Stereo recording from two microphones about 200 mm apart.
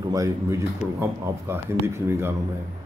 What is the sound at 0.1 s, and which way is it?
Speech, 15° right (ahead or behind).